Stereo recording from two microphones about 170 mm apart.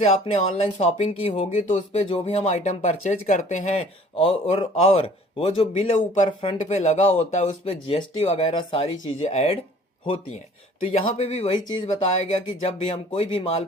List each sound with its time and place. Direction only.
0.0 s speech: 40° left (ahead or behind)
5.7 s speech: 45° left (ahead or behind)
6.2 s speech: 35° left (ahead or behind)
10.9 s speech: 45° left (ahead or behind)